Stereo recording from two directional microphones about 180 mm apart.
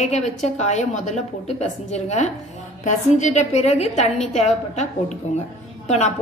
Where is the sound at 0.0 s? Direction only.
40° left (ahead or behind).